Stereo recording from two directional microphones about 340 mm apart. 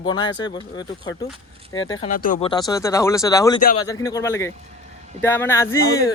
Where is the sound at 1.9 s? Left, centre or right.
Centre.